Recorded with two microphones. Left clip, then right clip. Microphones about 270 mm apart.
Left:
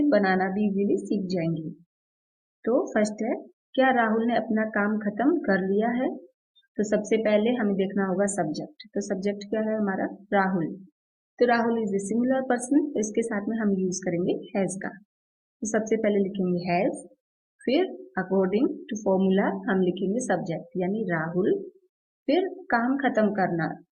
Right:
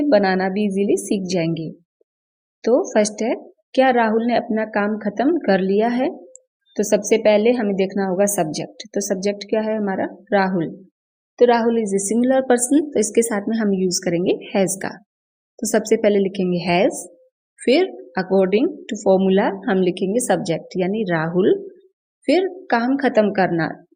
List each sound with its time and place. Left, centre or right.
0.1 s a woman's voice: right
2.6 s a woman's voice: right
22.3 s a woman's voice: right